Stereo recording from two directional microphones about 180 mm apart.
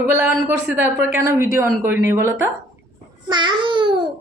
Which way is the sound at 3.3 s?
25° right (ahead or behind).